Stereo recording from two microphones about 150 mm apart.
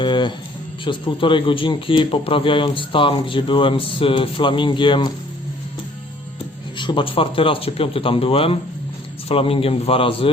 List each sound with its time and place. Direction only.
0.0 s music: 30° left (ahead or behind)
0.9 s speech: 35° left (ahead or behind)
6.7 s speech: 30° left (ahead or behind)